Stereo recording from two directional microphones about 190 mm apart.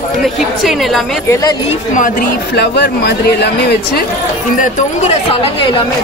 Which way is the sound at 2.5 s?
60° left (ahead or behind).